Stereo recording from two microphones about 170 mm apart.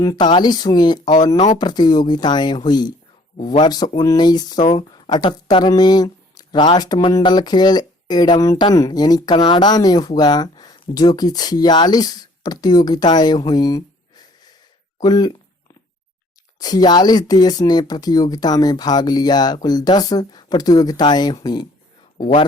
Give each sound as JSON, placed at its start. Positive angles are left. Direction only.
{"t": 0.0, "sound": "speech", "side_deg": 25}
{"t": 16.6, "sound": "speech", "side_deg": 25}